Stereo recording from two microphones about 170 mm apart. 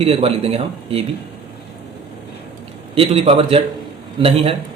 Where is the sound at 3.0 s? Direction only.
35° right (ahead or behind).